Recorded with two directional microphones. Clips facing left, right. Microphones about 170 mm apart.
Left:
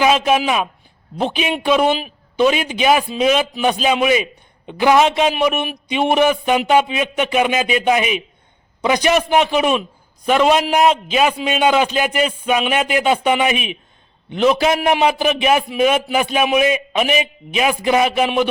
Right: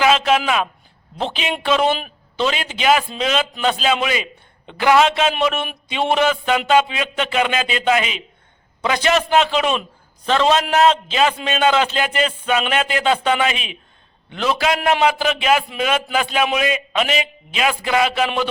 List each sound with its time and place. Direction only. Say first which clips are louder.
0.0 s a man's voice: left 1 dB; 15° left (ahead or behind)